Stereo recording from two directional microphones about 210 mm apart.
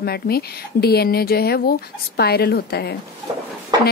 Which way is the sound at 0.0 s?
50° left (ahead or behind).